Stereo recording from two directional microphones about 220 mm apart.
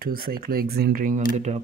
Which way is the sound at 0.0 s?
40° right (ahead or behind).